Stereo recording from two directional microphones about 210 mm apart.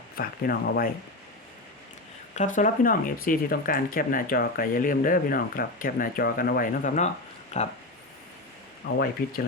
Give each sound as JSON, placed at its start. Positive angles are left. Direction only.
{"t": 0.2, "sound": "speech", "side_deg": 45}
{"t": 2.3, "sound": "speech", "side_deg": 35}
{"t": 8.8, "sound": "speech", "side_deg": 50}